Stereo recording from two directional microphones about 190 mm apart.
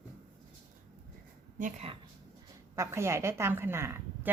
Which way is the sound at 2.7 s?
15° right (ahead or behind).